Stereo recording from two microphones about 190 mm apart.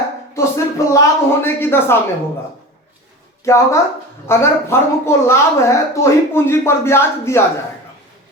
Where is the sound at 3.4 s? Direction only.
15° left (ahead or behind).